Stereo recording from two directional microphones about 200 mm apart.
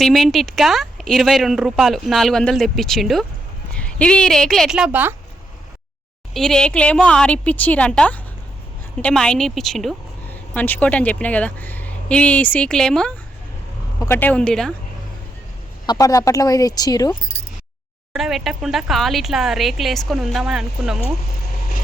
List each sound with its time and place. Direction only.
0.0 s a woman's voice: centre (ahead or behind)
6.3 s a woman's voice: 5° left (ahead or behind)
15.9 s speech: 15° left (ahead or behind)
18.1 s a woman's voice: centre (ahead or behind)